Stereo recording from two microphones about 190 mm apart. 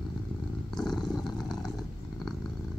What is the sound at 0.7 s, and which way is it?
Purr, 5° left (ahead or behind).